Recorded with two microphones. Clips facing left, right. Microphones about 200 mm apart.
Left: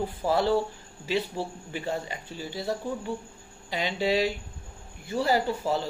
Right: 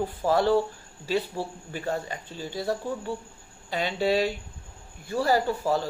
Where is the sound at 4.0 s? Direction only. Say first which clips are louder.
Right 1 dB; 45° right (ahead or behind).